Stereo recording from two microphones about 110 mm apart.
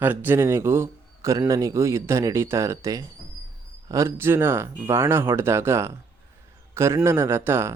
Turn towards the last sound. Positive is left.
turn(degrees=-20)  # may be behind; listen again after turning